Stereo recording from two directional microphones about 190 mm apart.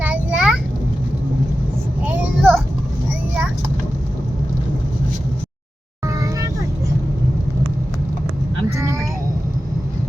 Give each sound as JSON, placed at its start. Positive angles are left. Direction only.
{"t": 0.0, "sound": "a sound", "side_deg": -5}
{"t": 2.0, "sound": "vehicle", "side_deg": -5}
{"t": 6.1, "sound": "vehicle", "side_deg": -15}
{"t": 8.8, "sound": "child singing", "side_deg": -15}